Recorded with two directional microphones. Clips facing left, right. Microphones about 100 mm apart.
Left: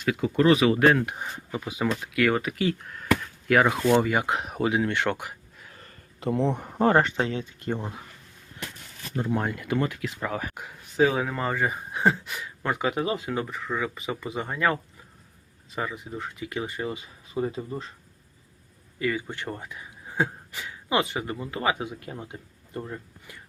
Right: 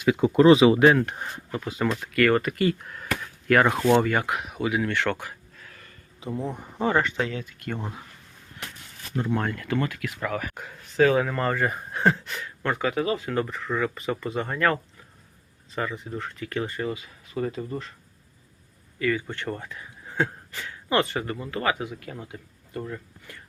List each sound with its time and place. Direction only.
0.1 s speech: 25° right (ahead or behind)
1.0 s speech: 5° left (ahead or behind)
4.3 s speech: 30° left (ahead or behind); by 5.7 s 15° left (ahead or behind)
5.7 s a sound: 35° left (ahead or behind)
6.1 s speech: 70° left (ahead or behind)
6.9 s speech: 35° left (ahead or behind)
9.1 s speech: 10° left (ahead or behind)
10.5 s speech: 10° left (ahead or behind)
13.3 s speech: 5° left (ahead or behind)
18.9 s speech: 15° left (ahead or behind)